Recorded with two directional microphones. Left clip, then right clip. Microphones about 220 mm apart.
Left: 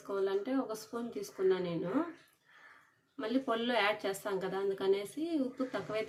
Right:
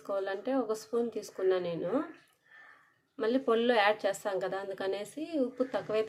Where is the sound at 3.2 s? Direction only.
35° right (ahead or behind).